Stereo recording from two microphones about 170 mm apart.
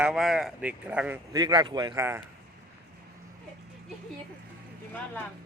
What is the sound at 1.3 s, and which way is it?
Speech, 25° right (ahead or behind).